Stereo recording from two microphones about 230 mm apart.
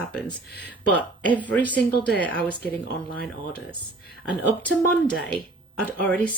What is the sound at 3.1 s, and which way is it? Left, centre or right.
Speech, centre.